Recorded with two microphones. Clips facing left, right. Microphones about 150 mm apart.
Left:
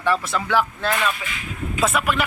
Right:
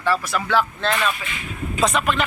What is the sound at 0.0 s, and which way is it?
Speech, 20° left (ahead or behind).